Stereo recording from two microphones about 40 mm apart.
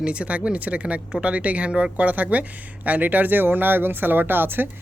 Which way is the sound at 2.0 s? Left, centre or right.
Right.